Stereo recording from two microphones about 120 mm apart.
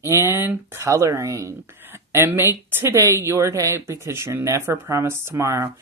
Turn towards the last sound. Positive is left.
turn(degrees=-25)  # may be behind; listen again after turning